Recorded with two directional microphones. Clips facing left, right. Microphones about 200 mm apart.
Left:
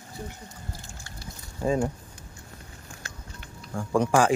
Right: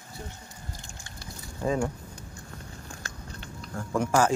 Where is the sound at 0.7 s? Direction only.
15° right (ahead or behind).